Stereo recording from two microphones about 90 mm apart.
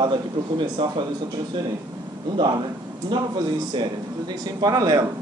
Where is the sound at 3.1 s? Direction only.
65° right (ahead or behind).